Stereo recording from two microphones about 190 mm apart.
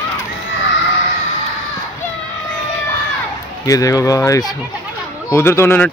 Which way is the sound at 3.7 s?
15° left (ahead or behind).